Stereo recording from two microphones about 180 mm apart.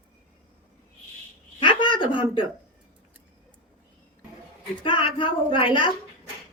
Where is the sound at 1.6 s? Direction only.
25° left (ahead or behind).